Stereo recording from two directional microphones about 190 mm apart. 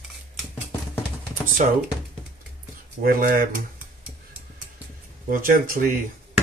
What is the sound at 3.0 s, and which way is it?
Speech, 50° right (ahead or behind).